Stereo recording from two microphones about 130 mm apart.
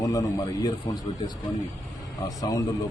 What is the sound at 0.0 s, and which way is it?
Speech, 25° left (ahead or behind).